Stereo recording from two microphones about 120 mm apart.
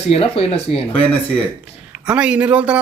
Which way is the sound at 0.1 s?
55° left (ahead or behind).